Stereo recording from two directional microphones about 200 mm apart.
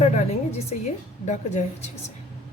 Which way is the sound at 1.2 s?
35° left (ahead or behind).